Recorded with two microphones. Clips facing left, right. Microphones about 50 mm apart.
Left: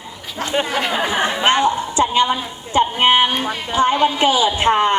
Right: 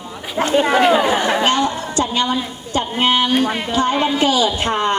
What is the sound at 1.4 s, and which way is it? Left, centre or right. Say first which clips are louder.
A woman's voice: left 1 dB; left.